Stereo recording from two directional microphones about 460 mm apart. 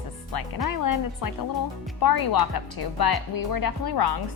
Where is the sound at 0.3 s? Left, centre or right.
Left.